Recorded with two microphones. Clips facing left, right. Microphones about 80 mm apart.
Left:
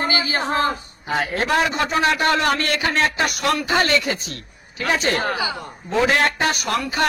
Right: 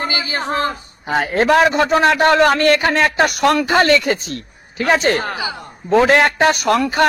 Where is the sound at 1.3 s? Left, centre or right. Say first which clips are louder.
Right 9 dB; right.